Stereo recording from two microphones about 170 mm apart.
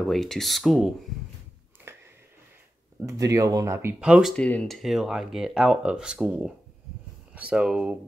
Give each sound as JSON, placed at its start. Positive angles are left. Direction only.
{"t": 0.1, "sound": "speech", "side_deg": 0}
{"t": 1.9, "sound": "a sound", "side_deg": -15}
{"t": 3.1, "sound": "speech", "side_deg": -20}